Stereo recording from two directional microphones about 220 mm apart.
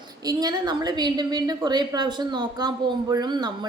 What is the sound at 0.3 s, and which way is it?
A woman's voice, 20° right (ahead or behind).